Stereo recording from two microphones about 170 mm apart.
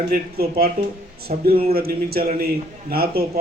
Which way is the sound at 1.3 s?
50° right (ahead or behind).